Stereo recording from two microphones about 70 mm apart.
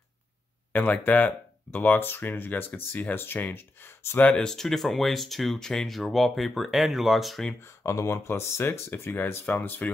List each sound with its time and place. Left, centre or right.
1.0 s speech: left
4.2 s speech: centre
4.5 s speech: centre
8.1 s speech: left